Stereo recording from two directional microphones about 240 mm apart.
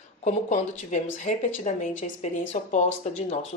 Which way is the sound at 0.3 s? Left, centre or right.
Left.